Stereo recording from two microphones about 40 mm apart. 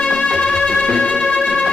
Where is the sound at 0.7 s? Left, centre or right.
Left.